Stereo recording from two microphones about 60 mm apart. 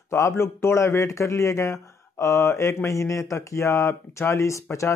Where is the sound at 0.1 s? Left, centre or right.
Left.